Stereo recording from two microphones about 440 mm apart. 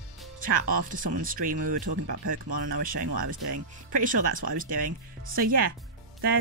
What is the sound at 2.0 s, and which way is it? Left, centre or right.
Speech, right.